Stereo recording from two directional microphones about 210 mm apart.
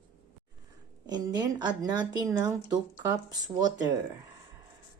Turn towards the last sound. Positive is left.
turn(degrees=-20)  # may be behind; listen again after turning